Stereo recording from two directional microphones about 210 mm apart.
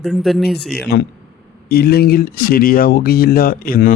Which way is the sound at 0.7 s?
50° left (ahead or behind).